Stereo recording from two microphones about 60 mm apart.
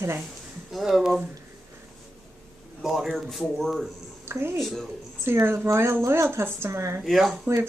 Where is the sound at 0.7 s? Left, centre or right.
Centre.